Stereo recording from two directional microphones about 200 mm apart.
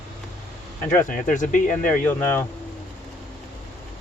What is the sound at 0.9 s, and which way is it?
Speech, 40° left (ahead or behind).